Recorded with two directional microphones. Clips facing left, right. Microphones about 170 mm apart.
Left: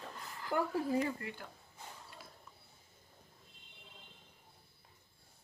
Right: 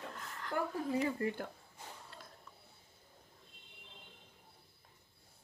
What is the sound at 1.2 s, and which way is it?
Speech, 45° right (ahead or behind).